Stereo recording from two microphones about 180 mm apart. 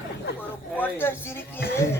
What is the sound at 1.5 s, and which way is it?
Goat, 65° left (ahead or behind).